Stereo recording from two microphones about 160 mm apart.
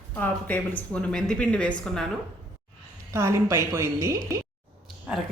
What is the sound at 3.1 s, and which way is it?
A woman's voice, 15° right (ahead or behind).